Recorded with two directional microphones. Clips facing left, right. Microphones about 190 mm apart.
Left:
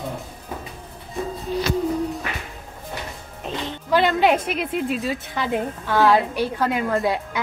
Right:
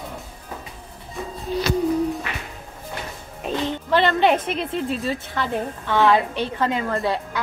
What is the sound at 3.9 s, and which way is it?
A woman's voice, 5° left (ahead or behind).